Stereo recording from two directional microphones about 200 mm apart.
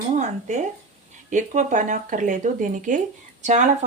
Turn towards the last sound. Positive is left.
turn(degrees=-35)  # may be behind; listen again after turning